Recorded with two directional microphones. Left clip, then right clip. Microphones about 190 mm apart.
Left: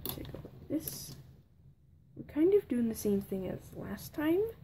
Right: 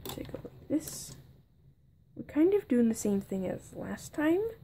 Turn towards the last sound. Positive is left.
turn(degrees=-20)  # may be behind; listen again after turning